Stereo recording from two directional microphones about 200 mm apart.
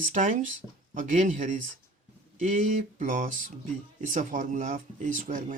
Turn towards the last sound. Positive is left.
turn(degrees=-40)  # may be behind; listen again after turning